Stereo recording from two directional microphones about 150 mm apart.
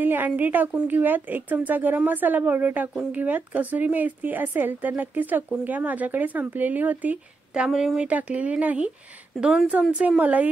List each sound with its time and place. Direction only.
0.0 s speech: 10° right (ahead or behind)